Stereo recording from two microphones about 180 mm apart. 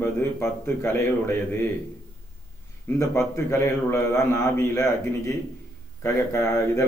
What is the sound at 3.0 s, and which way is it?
A man's voice, 15° left (ahead or behind).